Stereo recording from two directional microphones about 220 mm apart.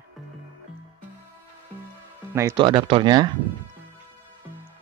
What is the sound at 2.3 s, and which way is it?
Speech, 15° right (ahead or behind).